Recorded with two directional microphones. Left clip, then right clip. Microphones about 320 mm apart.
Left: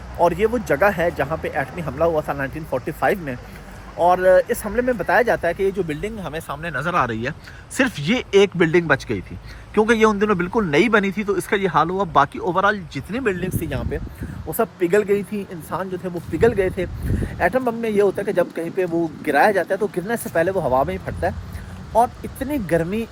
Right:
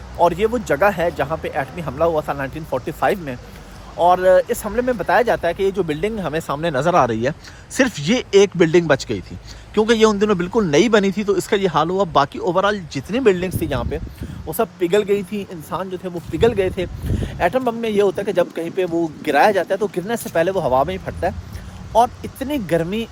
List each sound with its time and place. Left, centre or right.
0.2 s speech: centre
5.9 s speech: right; by 13.3 s centre
13.3 s speech: centre
14.4 s speech: centre